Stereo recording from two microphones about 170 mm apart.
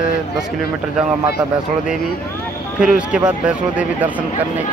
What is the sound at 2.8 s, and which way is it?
Speech, 5° right (ahead or behind).